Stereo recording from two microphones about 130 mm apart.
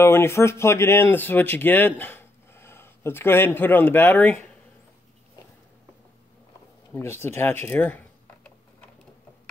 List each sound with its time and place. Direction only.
0.0 s speech: 20° left (ahead or behind)
7.0 s speech: 20° left (ahead or behind)
7.6 s computer keyboard: 15° left (ahead or behind)